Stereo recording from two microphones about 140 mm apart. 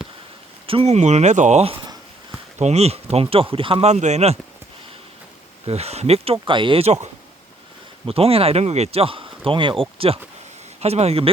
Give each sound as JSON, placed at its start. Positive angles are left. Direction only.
{"t": 0.7, "sound": "speech", "side_deg": -45}
{"t": 5.6, "sound": "speech", "side_deg": -50}